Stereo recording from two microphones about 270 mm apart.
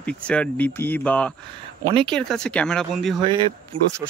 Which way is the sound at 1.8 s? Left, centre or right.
Right.